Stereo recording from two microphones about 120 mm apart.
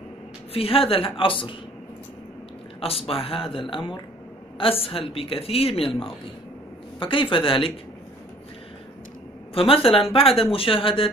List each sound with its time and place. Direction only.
0.5 s speech: 55° left (ahead or behind)
2.8 s speech: 50° left (ahead or behind)
9.5 s speech: 50° left (ahead or behind)